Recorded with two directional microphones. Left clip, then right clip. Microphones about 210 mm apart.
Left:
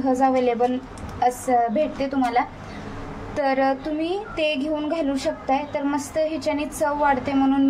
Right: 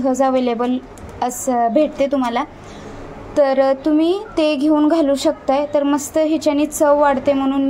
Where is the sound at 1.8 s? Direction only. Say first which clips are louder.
Right 7 dB; 40° right (ahead or behind).